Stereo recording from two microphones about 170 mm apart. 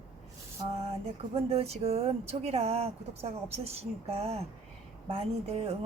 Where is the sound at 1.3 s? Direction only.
35° right (ahead or behind).